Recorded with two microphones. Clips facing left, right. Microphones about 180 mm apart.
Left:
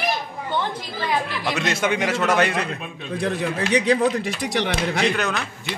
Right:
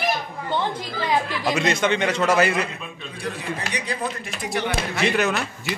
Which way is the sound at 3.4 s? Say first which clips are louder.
Left 8 dB; 75° left (ahead or behind).